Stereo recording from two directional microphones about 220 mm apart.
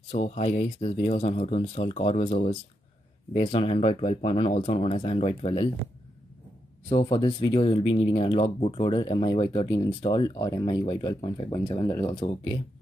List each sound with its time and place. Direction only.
0.1 s speech: 30° left (ahead or behind)
6.9 s speech: 20° left (ahead or behind)